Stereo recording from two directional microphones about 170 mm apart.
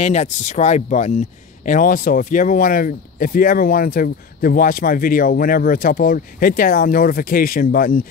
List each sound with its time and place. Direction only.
0.0 s speech: 40° left (ahead or behind)